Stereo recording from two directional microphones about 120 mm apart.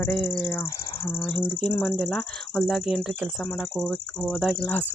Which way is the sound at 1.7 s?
5° left (ahead or behind).